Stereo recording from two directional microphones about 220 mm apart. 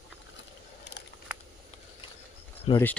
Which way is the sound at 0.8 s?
50° left (ahead or behind).